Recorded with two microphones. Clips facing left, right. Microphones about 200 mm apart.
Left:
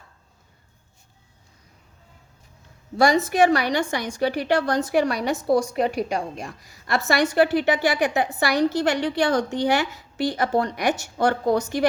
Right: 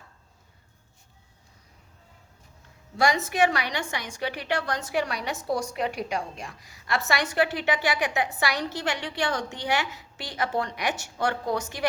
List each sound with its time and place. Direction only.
3.0 s a woman's voice: 35° left (ahead or behind)